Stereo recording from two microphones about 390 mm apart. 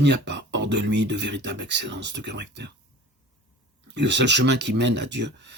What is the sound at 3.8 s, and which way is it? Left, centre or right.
Speech, right.